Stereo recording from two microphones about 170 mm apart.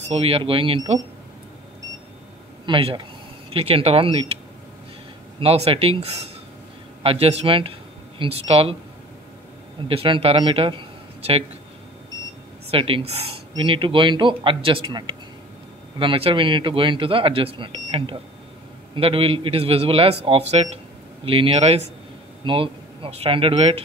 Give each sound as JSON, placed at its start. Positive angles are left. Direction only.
{"t": 0.1, "sound": "speech", "side_deg": -35}
{"t": 2.6, "sound": "speech", "side_deg": -30}
{"t": 5.4, "sound": "speech", "side_deg": -35}
{"t": 9.8, "sound": "a man's voice", "side_deg": -30}
{"t": 12.7, "sound": "speech", "side_deg": -35}